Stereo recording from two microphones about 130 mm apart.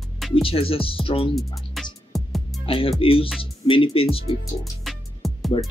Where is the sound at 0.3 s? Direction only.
45° left (ahead or behind).